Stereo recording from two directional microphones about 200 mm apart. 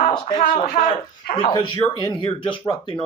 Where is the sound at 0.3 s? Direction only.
45° left (ahead or behind).